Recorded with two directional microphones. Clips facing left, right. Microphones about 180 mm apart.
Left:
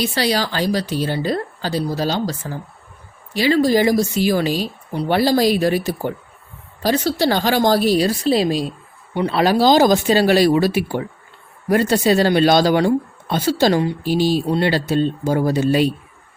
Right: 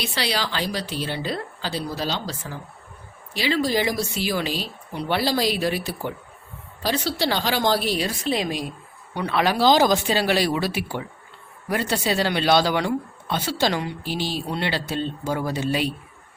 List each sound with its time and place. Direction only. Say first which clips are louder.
0.0 s speech: left 7 dB; 40° left (ahead or behind)